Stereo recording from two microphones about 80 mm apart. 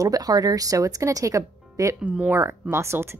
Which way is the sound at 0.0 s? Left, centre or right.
Right.